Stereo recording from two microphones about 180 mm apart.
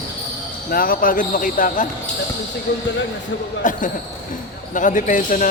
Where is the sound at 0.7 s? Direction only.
55° left (ahead or behind).